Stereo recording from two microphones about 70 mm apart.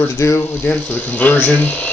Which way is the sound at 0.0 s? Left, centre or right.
Left.